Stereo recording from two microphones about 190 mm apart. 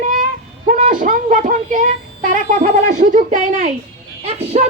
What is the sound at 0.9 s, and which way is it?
Speech, 45° right (ahead or behind).